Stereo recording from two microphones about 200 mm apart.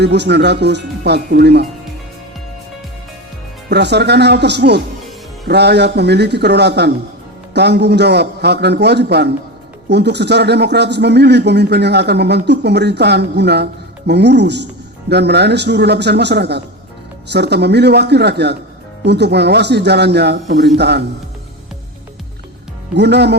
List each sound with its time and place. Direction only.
0.0 s speech: 55° right (ahead or behind)
3.7 s speech: 55° right (ahead or behind)
23.0 s speech: 55° right (ahead or behind)